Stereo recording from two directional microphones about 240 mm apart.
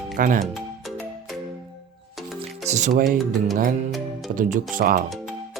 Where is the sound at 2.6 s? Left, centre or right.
Right.